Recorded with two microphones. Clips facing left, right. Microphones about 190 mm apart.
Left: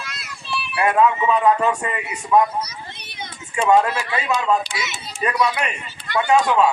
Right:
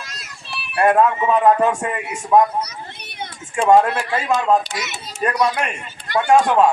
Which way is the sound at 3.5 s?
50° right (ahead or behind).